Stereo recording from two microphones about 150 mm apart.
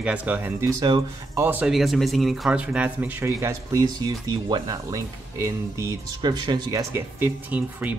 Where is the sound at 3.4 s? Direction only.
20° right (ahead or behind).